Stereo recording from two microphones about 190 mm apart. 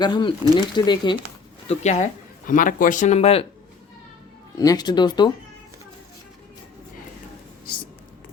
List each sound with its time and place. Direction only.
0.0 s speech: 25° left (ahead or behind)
1.6 s speech: 35° left (ahead or behind)
4.5 s speech: 20° left (ahead or behind)